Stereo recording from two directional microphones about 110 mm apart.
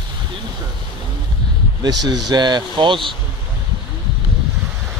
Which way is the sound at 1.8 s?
35° right (ahead or behind).